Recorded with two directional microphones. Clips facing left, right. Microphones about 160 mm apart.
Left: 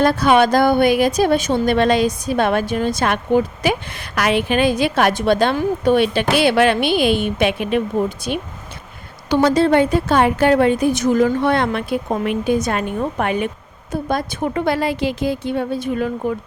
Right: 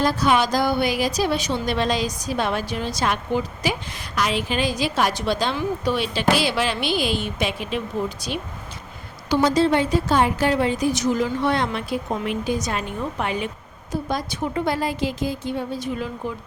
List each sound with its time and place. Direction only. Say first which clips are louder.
0.0 s a woman's voice: left 6 dB; 60° left (ahead or behind)